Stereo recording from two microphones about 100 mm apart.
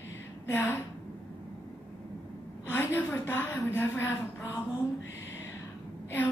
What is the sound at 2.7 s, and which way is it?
A woman's voice, 20° left (ahead or behind).